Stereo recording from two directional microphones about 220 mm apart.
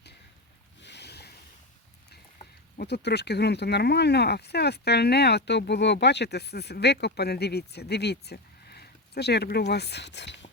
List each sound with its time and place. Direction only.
0.8 s boat: 50° left (ahead or behind)
2.4 s speech: 45° left (ahead or behind)